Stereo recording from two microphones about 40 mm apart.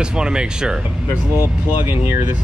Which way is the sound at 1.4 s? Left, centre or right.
Right.